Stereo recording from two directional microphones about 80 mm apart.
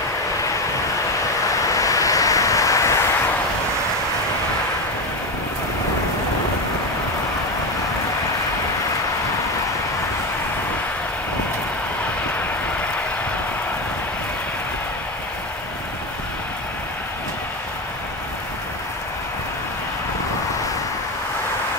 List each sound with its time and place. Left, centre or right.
1.5 s vehicle: left